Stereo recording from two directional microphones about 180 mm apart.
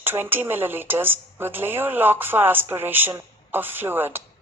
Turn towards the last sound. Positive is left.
turn(degrees=-10)  # may be behind; listen again after turning